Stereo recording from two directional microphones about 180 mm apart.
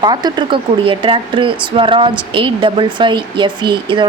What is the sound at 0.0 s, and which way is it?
A woman's voice, 25° right (ahead or behind).